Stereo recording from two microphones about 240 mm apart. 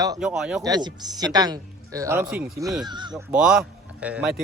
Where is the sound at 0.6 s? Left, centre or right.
Centre.